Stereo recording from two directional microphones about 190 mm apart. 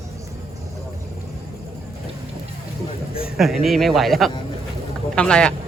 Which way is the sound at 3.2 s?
Centre (ahead or behind).